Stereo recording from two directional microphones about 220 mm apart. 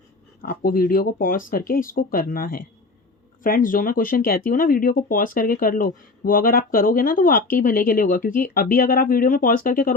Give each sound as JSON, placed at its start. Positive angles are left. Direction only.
{"t": 0.4, "sound": "speech", "side_deg": 40}